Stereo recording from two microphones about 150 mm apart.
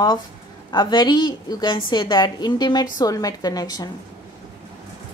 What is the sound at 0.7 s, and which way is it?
A woman's voice, 30° left (ahead or behind).